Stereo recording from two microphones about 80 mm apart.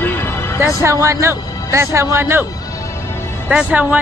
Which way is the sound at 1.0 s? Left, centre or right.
Right.